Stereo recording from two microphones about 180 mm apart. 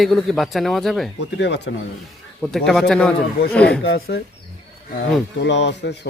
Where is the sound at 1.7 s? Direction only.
90° left.